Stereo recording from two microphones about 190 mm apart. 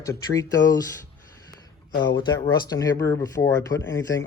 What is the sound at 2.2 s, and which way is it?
Speech, 20° left (ahead or behind).